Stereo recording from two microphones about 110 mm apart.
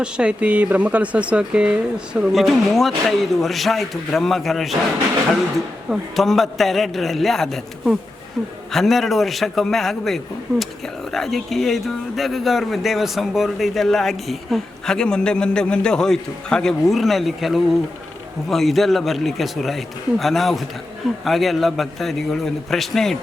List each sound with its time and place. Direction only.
0.0 s speech: 10° right (ahead or behind)
5.9 s speech: centre (ahead or behind)